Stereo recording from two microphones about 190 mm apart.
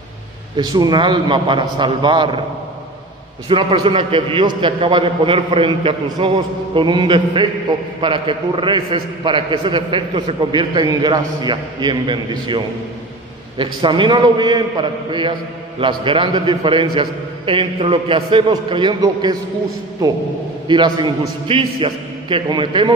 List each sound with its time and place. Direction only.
0.6 s a man's voice: 20° right (ahead or behind)
3.4 s a man's voice: 30° right (ahead or behind)
20.6 s a man's voice: 25° right (ahead or behind)